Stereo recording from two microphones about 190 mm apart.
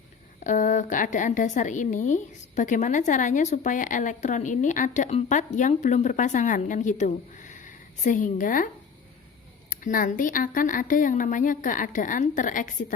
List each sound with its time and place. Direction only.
0.3 s a woman's voice: 40° left (ahead or behind)